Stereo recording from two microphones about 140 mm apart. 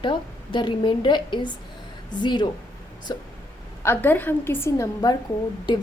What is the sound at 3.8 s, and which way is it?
A woman's voice, 15° left (ahead or behind).